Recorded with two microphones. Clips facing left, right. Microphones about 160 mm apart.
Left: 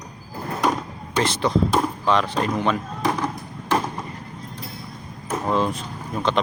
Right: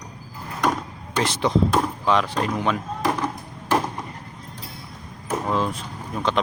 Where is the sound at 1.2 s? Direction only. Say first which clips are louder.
Even; 15° right (ahead or behind).